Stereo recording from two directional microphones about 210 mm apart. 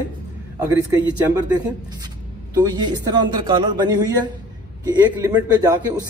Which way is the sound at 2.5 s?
20° right (ahead or behind).